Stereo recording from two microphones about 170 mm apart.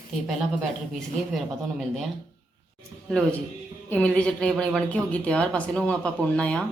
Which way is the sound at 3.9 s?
5° left (ahead or behind).